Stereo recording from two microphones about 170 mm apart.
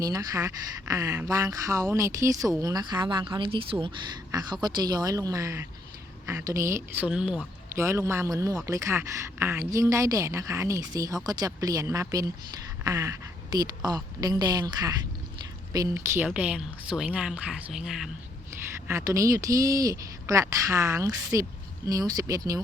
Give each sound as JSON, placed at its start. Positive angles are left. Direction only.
{"t": 0.0, "sound": "a woman's voice", "side_deg": -20}
{"t": 7.8, "sound": "speech", "side_deg": -15}
{"t": 18.9, "sound": "speech", "side_deg": -15}